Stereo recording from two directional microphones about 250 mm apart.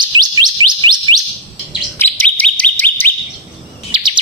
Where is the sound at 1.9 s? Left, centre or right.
Centre.